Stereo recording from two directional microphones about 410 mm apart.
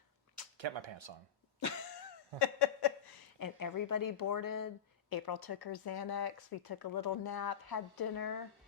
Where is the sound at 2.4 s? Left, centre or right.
Left.